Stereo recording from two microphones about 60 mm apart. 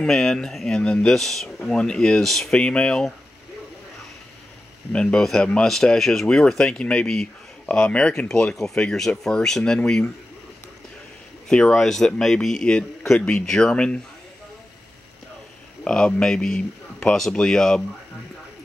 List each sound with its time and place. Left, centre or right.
0.0 s speech: centre
2.6 s speech: centre
4.9 s speech: centre
11.4 s speech: centre
15.8 s speech: centre